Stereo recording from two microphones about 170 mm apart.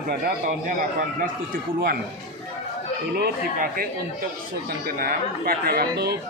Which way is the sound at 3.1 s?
65° right (ahead or behind).